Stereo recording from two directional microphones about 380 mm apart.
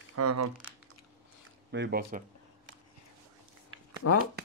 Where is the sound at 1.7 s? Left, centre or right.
Right.